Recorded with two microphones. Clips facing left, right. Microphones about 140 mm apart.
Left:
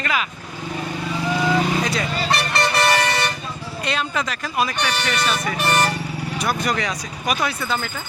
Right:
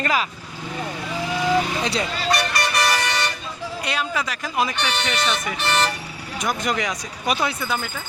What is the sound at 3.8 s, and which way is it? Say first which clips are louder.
Speech: left 2 dB; 10° right (ahead or behind).